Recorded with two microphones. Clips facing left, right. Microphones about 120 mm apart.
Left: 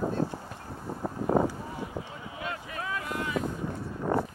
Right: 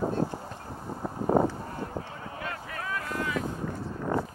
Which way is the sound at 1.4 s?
10° left (ahead or behind).